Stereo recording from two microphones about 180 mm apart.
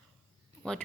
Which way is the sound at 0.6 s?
5° left (ahead or behind).